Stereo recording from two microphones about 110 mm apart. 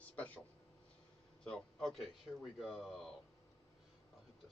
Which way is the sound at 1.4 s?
5° left (ahead or behind).